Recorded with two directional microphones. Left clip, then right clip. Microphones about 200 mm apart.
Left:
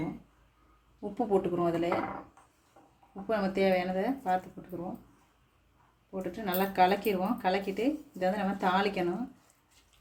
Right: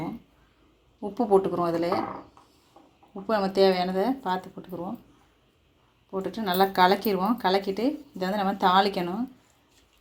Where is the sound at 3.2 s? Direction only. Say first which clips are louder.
Right 7 dB; 15° right (ahead or behind).